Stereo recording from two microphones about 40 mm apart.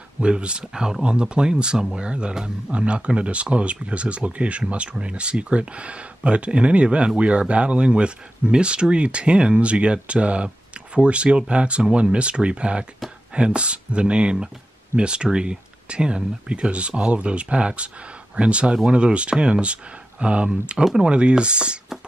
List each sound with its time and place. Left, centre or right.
0.2 s speech: right
20.7 s speech: centre
21.1 s speech: right